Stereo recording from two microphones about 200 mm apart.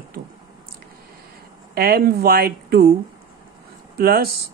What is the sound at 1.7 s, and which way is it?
Speech, 50° right (ahead or behind).